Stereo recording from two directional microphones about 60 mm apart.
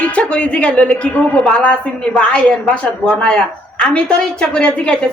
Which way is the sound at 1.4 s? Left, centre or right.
Centre.